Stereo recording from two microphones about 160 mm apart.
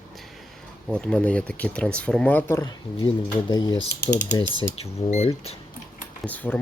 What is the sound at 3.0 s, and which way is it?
Speech, 30° left (ahead or behind).